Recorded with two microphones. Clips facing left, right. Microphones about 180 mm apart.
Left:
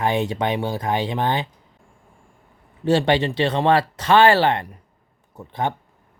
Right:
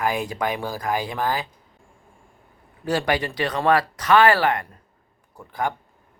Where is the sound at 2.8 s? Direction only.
25° left (ahead or behind).